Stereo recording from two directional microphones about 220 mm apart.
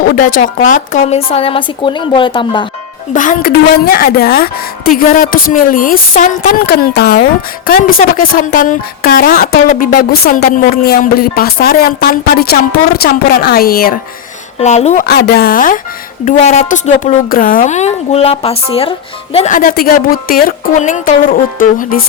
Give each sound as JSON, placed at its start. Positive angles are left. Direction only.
{"t": 0.0, "sound": "speech", "side_deg": 40}
{"t": 3.1, "sound": "speech", "side_deg": 35}
{"t": 14.6, "sound": "speech", "side_deg": 30}
{"t": 15.0, "sound": "speech", "side_deg": 45}